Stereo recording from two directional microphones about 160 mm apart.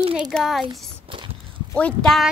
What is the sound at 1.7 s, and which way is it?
Speech, 5° left (ahead or behind).